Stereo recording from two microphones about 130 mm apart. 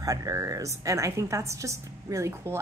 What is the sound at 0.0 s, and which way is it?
Speech, 25° right (ahead or behind).